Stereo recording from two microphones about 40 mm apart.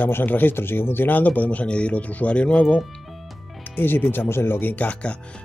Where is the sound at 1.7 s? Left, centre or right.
Left.